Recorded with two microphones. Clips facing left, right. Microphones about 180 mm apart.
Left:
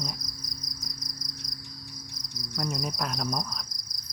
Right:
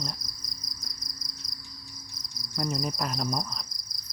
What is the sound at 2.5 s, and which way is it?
Cricket, centre (ahead or behind).